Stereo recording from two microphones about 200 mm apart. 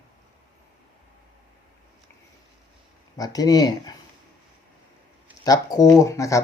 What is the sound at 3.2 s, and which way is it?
Speech, 20° left (ahead or behind).